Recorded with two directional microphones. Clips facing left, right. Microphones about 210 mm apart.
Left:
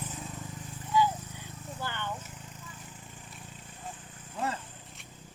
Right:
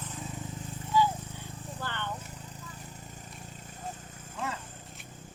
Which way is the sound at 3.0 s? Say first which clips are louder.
Right 2 dB; 40° right (ahead or behind).